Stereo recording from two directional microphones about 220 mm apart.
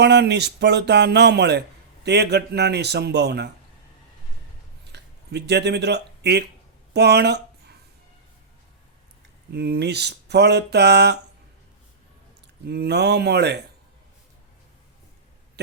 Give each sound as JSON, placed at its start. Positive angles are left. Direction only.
{"t": 0.0, "sound": "speech", "side_deg": -50}
{"t": 4.9, "sound": "speech", "side_deg": -50}
{"t": 9.5, "sound": "speech", "side_deg": -45}
{"t": 12.6, "sound": "speech", "side_deg": -45}